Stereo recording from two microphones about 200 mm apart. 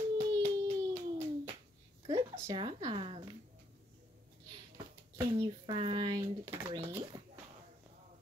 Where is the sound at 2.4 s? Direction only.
20° right (ahead or behind).